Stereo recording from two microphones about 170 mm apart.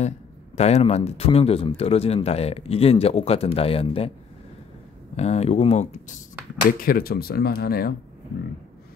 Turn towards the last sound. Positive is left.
turn(degrees=60)  # may be behind; listen again after turning